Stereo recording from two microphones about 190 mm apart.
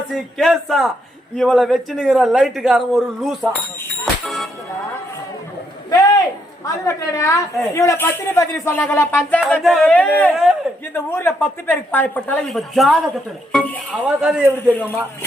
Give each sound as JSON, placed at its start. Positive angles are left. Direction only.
{"t": 0.1, "sound": "a man's voice", "side_deg": 0}
{"t": 4.0, "sound": "music", "side_deg": 0}
{"t": 5.9, "sound": "a sound", "side_deg": 15}
{"t": 6.8, "sound": "speech", "side_deg": 15}
{"t": 9.5, "sound": "speech", "side_deg": 0}
{"t": 10.3, "sound": "a man's voice", "side_deg": 0}
{"t": 10.9, "sound": "a man's voice", "side_deg": 10}
{"t": 14.4, "sound": "speech", "side_deg": 10}